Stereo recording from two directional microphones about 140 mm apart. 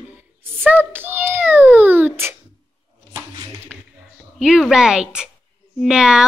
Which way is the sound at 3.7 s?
10° right (ahead or behind).